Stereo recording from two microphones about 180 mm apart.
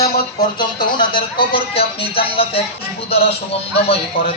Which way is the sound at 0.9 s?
25° left (ahead or behind).